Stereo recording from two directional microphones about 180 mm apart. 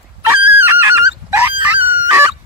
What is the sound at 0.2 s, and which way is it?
Dog, 10° right (ahead or behind).